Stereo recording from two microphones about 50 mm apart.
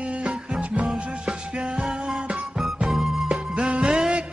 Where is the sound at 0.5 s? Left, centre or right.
Right.